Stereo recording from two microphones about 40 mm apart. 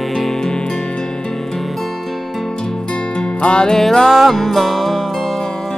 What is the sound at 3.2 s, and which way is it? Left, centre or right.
Music, left.